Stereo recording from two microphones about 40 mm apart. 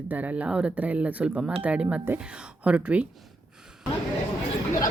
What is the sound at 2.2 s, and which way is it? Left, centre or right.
Speech, right.